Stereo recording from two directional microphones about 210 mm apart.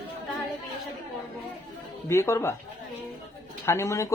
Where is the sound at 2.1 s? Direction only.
15° left (ahead or behind).